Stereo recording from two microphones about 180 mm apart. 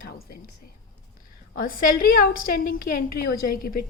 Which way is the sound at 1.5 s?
50° left (ahead or behind).